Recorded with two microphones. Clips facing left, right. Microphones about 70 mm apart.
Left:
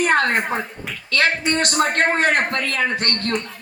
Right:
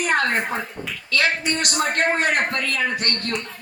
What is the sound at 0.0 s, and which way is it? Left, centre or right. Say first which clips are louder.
A woman's voice: left 3 dB; left.